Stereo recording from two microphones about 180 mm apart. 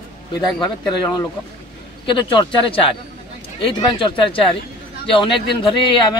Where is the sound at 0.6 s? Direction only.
25° left (ahead or behind).